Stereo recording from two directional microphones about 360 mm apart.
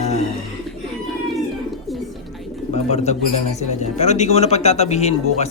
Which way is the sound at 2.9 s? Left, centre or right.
Centre.